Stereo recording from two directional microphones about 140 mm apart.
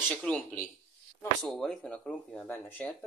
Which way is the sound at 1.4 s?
5° left (ahead or behind).